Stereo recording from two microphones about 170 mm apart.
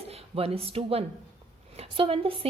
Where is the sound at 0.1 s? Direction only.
35° right (ahead or behind).